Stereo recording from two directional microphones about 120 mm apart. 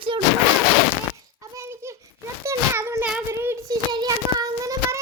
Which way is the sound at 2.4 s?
25° right (ahead or behind).